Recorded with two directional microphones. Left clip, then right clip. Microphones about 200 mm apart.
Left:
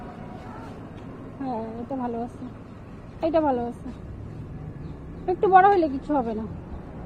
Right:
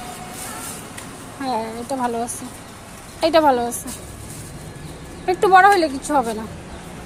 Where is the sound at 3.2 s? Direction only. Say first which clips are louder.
Right 8 dB; 15° right (ahead or behind).